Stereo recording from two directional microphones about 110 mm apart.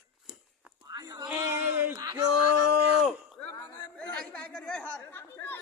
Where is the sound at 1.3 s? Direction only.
20° right (ahead or behind).